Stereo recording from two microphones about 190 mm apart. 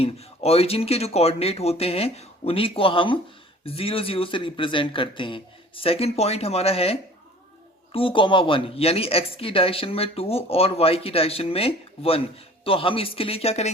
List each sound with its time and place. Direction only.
0.0 s speech: 30° left (ahead or behind)